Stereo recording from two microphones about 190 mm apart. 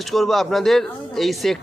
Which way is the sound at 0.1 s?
Centre (ahead or behind).